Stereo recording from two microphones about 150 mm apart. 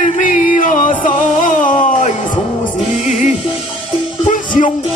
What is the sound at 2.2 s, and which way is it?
Music, 30° left (ahead or behind).